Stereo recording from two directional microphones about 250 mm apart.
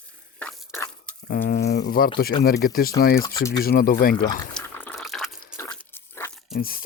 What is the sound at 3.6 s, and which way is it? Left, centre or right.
Speech, left.